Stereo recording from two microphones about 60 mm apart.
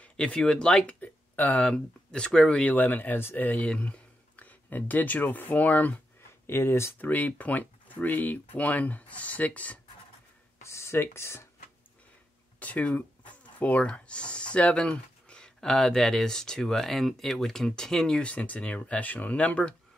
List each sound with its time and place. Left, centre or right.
0.0 s speech: left
0.8 s speech: left
1.7 s speech: centre
2.7 s speech: left
6.4 s speech: left
7.0 s speech: left
10.6 s speech: left
12.5 s speech: left; by 18.2 s centre
18.2 s speech: left